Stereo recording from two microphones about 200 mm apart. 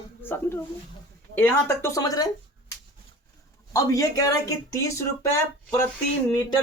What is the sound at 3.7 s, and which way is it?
Speech, 15° left (ahead or behind).